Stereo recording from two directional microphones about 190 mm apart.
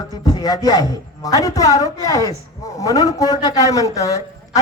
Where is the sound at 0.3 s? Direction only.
20° left (ahead or behind).